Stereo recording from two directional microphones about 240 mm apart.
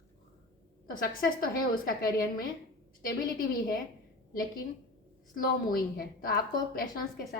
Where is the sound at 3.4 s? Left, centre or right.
Left.